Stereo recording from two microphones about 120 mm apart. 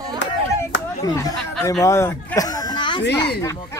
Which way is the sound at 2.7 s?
40° left (ahead or behind).